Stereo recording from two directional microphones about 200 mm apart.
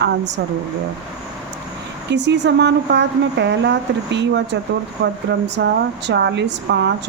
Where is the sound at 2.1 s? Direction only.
60° right (ahead or behind).